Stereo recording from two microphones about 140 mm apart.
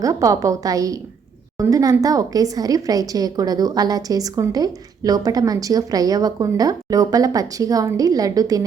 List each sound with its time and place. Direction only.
0.0 s a woman's voice: 25° right (ahead or behind)